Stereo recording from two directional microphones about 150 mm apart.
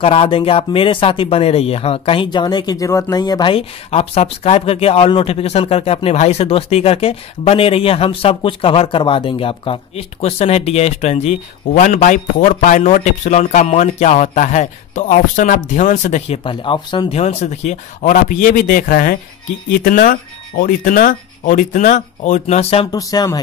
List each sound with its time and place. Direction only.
0.0 s speech: 40° left (ahead or behind)
16.4 s speech: 35° left (ahead or behind)
17.1 s speech: 45° left (ahead or behind)
22.8 s speech: 25° left (ahead or behind)